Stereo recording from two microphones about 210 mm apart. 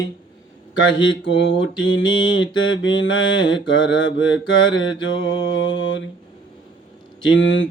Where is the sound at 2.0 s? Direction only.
20° left (ahead or behind).